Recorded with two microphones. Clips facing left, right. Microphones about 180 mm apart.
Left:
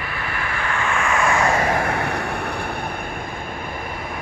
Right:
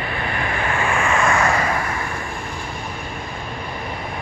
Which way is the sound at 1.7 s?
60° left (ahead or behind).